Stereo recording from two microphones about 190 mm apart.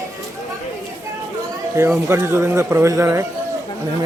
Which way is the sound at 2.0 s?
15° right (ahead or behind).